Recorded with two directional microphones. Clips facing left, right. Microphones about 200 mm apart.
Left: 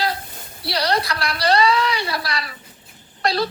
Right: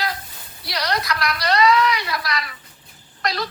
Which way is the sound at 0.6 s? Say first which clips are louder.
Left 4 dB; 30° left (ahead or behind).